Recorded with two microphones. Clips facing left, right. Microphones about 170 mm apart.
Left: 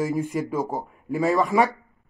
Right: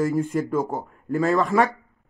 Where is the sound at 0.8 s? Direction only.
Centre (ahead or behind).